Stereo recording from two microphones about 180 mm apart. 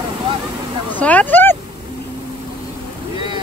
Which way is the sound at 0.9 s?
10° left (ahead or behind).